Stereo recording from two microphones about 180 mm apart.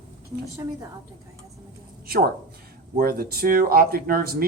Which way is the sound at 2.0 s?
60° right (ahead or behind).